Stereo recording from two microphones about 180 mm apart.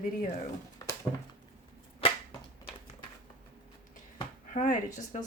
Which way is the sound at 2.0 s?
30° left (ahead or behind).